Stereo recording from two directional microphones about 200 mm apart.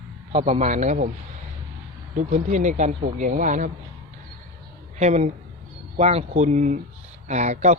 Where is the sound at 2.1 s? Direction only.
35° right (ahead or behind).